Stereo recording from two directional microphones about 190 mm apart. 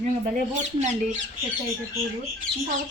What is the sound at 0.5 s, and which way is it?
Speech, 40° right (ahead or behind).